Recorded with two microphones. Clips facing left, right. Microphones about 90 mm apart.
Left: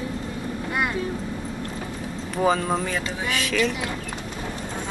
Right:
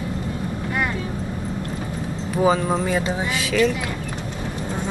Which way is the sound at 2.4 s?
5° right (ahead or behind).